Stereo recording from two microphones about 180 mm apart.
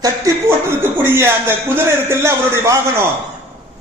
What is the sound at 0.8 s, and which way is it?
Speech, 15° right (ahead or behind).